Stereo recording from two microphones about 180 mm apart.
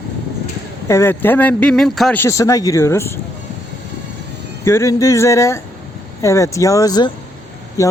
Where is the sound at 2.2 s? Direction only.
15° left (ahead or behind).